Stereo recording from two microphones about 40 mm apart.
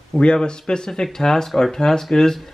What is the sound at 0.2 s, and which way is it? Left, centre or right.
Speech, left.